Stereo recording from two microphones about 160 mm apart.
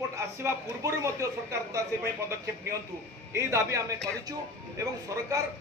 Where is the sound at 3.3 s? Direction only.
20° right (ahead or behind).